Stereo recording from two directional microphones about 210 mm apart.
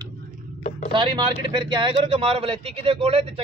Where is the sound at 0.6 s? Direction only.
30° left (ahead or behind).